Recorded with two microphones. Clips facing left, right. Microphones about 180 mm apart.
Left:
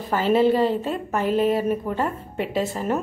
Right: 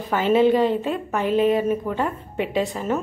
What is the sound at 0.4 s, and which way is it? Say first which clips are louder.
A woman's voice: right 2 dB; centre (ahead or behind).